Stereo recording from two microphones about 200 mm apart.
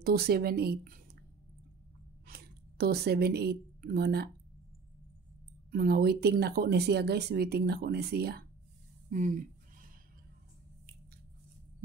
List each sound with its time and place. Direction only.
0.0 s speech: 50° right (ahead or behind)
2.2 s speech: 50° right (ahead or behind)
5.7 s speech: 50° right (ahead or behind)